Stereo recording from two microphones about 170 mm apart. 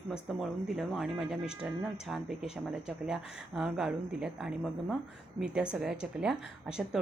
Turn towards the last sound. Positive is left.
turn(degrees=-5)  # may be behind; listen again after turning